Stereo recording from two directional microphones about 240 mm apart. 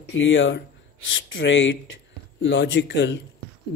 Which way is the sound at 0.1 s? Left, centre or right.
Left.